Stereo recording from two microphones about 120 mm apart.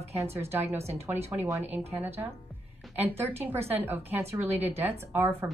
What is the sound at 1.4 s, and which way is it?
A woman's voice, 15° right (ahead or behind).